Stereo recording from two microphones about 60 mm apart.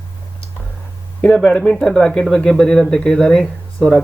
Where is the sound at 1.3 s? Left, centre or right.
Centre.